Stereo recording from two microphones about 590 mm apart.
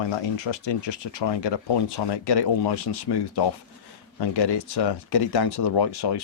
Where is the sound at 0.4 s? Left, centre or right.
Left.